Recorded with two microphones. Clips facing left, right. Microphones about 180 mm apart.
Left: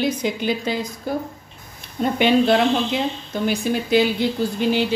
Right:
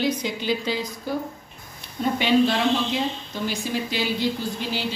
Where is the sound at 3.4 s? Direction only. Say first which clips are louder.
Left 5 dB; 55° left (ahead or behind).